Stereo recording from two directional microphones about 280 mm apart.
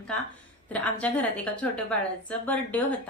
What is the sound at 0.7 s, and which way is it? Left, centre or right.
A woman's voice, centre.